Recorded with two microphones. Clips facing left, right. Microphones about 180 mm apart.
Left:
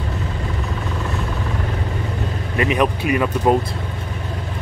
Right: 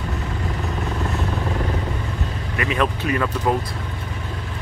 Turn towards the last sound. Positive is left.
turn(degrees=15)  # may be behind; listen again after turning